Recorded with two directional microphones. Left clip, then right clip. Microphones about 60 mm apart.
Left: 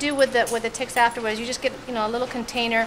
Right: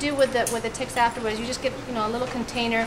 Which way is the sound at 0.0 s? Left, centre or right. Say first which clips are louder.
Left 2 dB; left.